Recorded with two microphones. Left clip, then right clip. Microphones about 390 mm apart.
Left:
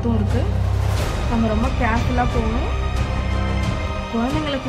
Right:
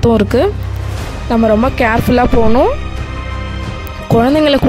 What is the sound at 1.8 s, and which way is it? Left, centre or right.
Speech, right.